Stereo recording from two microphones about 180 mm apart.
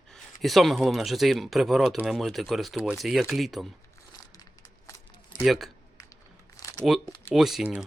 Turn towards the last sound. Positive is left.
turn(degrees=-5)  # may be behind; listen again after turning